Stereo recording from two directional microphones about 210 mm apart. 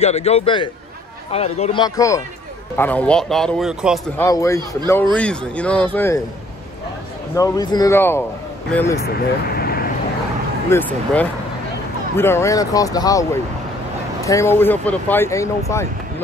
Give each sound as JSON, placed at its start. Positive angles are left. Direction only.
{"t": 0.0, "sound": "a man's voice", "side_deg": 30}
{"t": 4.2, "sound": "a man's voice", "side_deg": 15}
{"t": 7.3, "sound": "speech", "side_deg": 15}
{"t": 9.6, "sound": "vehicle", "side_deg": 45}
{"t": 10.7, "sound": "speech", "side_deg": 10}